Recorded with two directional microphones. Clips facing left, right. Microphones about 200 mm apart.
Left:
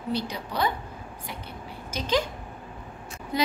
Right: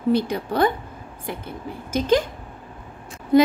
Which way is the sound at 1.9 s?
50° right (ahead or behind).